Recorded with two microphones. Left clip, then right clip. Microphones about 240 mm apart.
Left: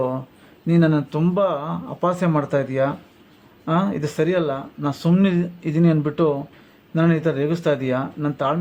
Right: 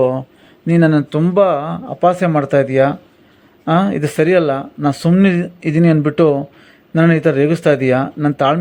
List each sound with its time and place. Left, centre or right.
0.7 s speech: centre